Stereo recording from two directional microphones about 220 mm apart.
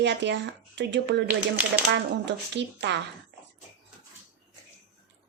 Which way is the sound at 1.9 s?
55° right (ahead or behind).